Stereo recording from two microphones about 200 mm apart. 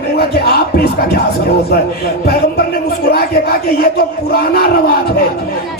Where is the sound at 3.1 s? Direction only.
50° left (ahead or behind).